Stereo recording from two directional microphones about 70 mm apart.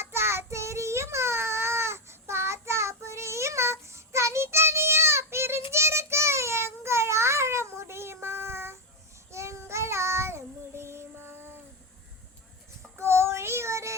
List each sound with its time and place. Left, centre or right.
0.0 s child singing: right
13.0 s child singing: right